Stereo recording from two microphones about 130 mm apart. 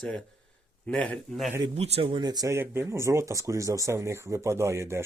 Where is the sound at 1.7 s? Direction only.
55° right (ahead or behind).